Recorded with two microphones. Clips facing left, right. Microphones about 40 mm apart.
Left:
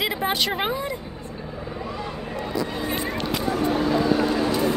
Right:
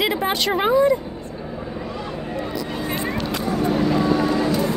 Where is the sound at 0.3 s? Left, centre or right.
Centre.